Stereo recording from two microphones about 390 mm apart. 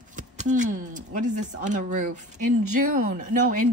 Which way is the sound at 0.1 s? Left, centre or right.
Centre.